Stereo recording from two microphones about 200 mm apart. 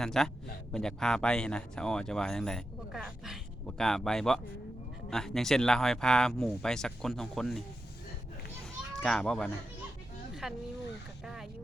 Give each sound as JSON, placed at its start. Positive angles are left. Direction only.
{"t": 0.0, "sound": "speech", "side_deg": 0}
{"t": 8.9, "sound": "a child's voice", "side_deg": 5}